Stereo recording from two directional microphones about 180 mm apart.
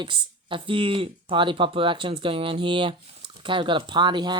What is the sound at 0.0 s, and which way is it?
Speech, 30° right (ahead or behind).